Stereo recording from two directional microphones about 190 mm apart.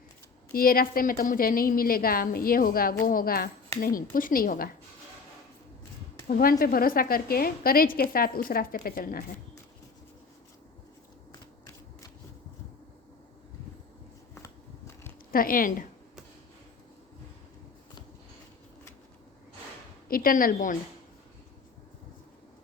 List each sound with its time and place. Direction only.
0.5 s a woman's voice: 50° left (ahead or behind)
6.2 s a woman's voice: 50° left (ahead or behind)
15.3 s a woman's voice: 50° left (ahead or behind)
20.1 s a woman's voice: 50° left (ahead or behind)